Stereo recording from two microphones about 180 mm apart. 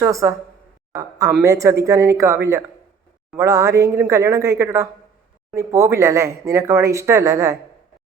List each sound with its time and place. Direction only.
0.0 s speech: 15° right (ahead or behind)
1.4 s speech: 15° right (ahead or behind)